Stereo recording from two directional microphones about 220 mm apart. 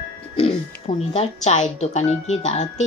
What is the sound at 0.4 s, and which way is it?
A woman's voice, 25° left (ahead or behind).